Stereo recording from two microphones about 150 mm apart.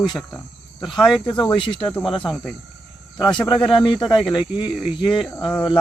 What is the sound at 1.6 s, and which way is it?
Speech, 35° left (ahead or behind).